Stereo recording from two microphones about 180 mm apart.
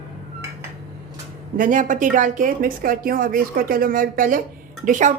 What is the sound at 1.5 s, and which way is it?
A woman's voice, 50° right (ahead or behind).